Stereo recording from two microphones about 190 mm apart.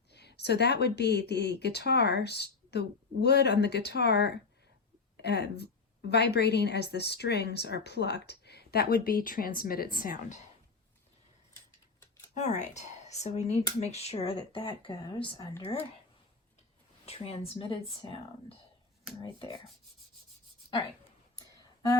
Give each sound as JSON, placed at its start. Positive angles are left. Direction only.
{"t": 0.1, "sound": "a woman's voice", "side_deg": 60}
{"t": 12.3, "sound": "speech", "side_deg": 40}
{"t": 17.1, "sound": "speech", "side_deg": 30}